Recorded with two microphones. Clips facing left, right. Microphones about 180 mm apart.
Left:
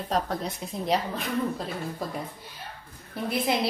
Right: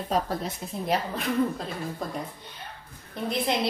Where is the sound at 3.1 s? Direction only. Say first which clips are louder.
Even; 5° left (ahead or behind).